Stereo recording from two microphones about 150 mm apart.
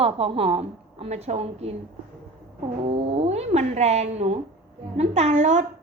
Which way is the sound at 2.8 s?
40° right (ahead or behind).